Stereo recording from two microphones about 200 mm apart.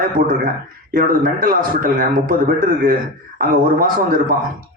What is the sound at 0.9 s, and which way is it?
A man's voice, 45° right (ahead or behind).